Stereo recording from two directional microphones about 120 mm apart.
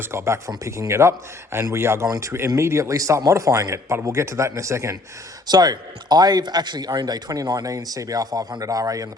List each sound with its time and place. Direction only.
0.0 s a man's voice: 20° right (ahead or behind)